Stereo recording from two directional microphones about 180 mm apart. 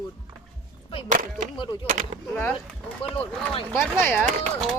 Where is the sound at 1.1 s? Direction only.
45° right (ahead or behind).